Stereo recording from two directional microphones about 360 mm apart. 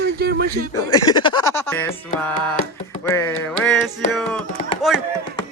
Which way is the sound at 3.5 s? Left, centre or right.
Centre.